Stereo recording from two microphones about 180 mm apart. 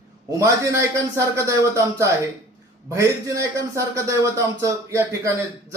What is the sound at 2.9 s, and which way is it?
A man's voice, 15° right (ahead or behind).